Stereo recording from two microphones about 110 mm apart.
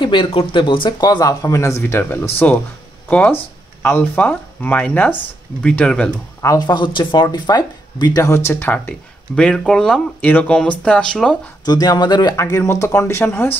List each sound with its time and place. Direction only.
0.0 s speech: 50° left (ahead or behind); by 6.0 s 10° left (ahead or behind)
6.6 s speech: 45° left (ahead or behind); by 11.3 s 10° left (ahead or behind)
11.6 s speech: 40° left (ahead or behind)
12.4 s speech: 25° left (ahead or behind)